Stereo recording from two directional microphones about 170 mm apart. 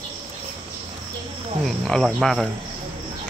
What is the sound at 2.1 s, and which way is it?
Speech, centre (ahead or behind).